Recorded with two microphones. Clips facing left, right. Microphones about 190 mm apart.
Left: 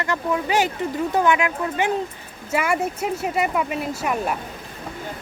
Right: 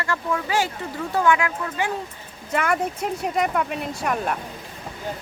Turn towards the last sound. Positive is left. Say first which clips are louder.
# left 1 dB
turn(degrees=5)  # may be behind; listen again after turning